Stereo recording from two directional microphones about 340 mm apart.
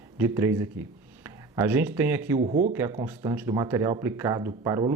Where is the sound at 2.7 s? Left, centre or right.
Centre.